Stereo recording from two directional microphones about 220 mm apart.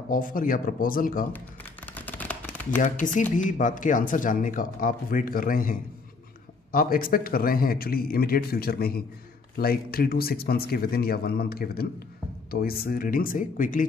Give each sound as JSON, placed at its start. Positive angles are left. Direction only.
{"t": 0.1, "sound": "speech", "side_deg": 40}
{"t": 1.9, "sound": "a sound", "side_deg": 5}
{"t": 2.8, "sound": "a man's voice", "side_deg": 35}